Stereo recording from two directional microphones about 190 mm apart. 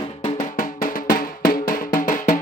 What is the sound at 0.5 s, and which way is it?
Music, 50° left (ahead or behind).